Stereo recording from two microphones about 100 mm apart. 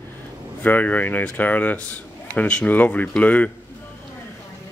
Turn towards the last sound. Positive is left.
turn(degrees=15)  # may be behind; listen again after turning